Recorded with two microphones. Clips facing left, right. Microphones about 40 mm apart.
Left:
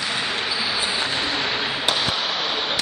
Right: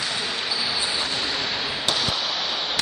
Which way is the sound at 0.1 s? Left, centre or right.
Left.